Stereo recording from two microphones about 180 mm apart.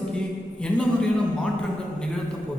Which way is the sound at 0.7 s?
5° left (ahead or behind).